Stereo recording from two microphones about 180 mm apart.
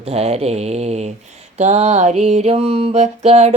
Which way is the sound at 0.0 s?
35° right (ahead or behind).